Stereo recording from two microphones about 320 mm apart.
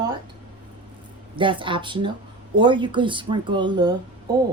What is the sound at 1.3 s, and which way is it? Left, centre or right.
A woman's voice, centre.